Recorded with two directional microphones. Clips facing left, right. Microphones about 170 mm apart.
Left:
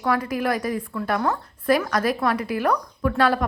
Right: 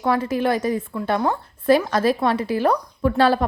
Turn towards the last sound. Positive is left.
turn(degrees=-30)  # may be behind; listen again after turning